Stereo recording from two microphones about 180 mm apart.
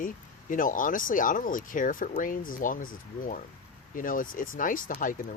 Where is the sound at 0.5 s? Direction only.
50° left (ahead or behind).